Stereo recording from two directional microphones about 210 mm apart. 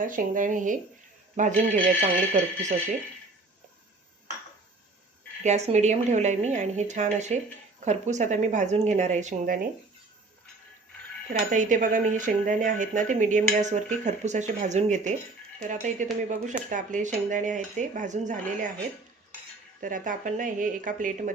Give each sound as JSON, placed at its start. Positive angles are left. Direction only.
{"t": 0.0, "sound": "speech", "side_deg": -40}
{"t": 5.4, "sound": "speech", "side_deg": -35}
{"t": 11.5, "sound": "speech", "side_deg": -35}
{"t": 19.8, "sound": "speech", "side_deg": -40}